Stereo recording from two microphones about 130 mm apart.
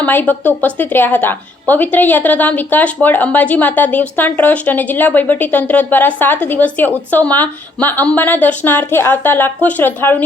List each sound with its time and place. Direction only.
0.0 s a woman's voice: 15° left (ahead or behind)